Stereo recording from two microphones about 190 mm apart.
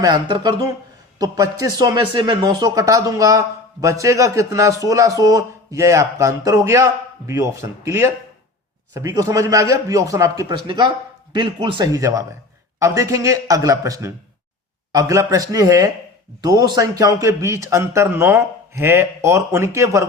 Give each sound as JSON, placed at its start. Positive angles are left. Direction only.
{"t": 0.0, "sound": "speech", "side_deg": -20}